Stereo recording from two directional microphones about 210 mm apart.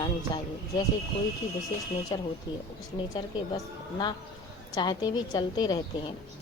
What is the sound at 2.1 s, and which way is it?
Speech, 20° left (ahead or behind).